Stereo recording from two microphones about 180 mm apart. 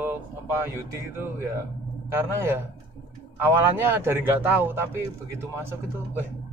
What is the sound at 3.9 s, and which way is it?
Speech, 10° right (ahead or behind).